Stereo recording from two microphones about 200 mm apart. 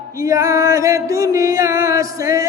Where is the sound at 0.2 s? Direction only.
15° right (ahead or behind).